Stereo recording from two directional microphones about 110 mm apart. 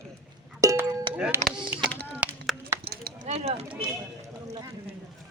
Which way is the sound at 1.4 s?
90° right.